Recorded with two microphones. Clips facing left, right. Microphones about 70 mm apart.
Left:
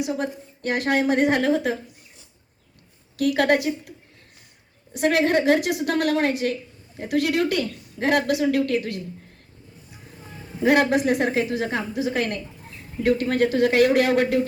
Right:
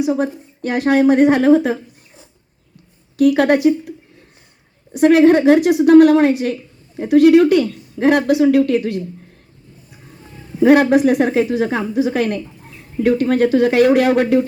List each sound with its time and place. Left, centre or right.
0.0 s speech: right
3.2 s speech: right
4.9 s speech: right
10.7 s speech: right